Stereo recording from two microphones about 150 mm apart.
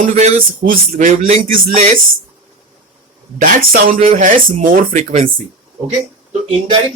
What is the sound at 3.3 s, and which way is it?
Speech, 70° right (ahead or behind).